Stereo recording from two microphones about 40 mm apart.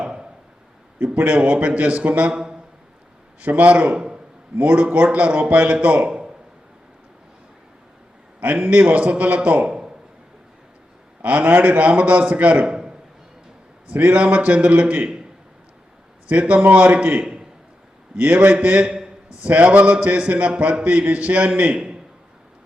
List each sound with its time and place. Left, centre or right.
0.0 s a sound: right
0.9 s a man's voice: right
3.4 s a man's voice: right
8.5 s a man's voice: right
9.6 s a sound: centre
11.2 s a man's voice: right
13.9 s a man's voice: right
16.3 s a man's voice: right